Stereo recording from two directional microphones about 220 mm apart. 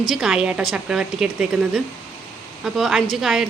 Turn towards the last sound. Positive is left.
turn(degrees=0)  # may be behind; listen again after turning